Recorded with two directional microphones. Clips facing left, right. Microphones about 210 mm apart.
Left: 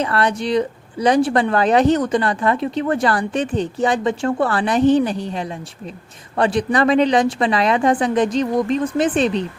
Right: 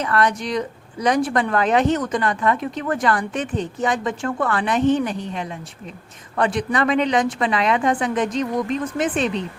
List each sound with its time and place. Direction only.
0.0 s speech: 30° left (ahead or behind)